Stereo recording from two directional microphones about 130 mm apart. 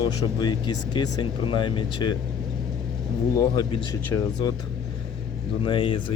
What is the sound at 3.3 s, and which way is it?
Speech, 35° left (ahead or behind).